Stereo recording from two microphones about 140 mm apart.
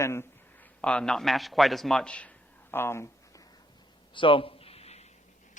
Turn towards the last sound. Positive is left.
turn(degrees=50)  # may be behind; listen again after turning